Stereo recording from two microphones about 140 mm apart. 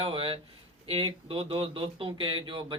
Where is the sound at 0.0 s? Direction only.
40° right (ahead or behind).